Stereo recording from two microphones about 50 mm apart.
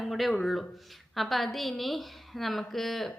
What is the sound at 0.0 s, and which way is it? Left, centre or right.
A woman's voice, centre.